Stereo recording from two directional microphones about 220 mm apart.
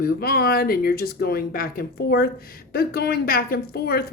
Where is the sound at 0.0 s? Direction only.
45° left (ahead or behind).